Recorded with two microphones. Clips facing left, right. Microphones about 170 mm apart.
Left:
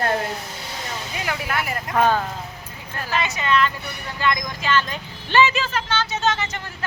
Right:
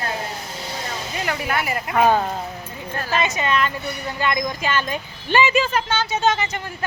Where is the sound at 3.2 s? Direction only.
20° right (ahead or behind).